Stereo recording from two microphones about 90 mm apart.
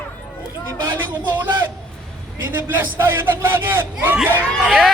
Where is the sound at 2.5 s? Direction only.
25° right (ahead or behind).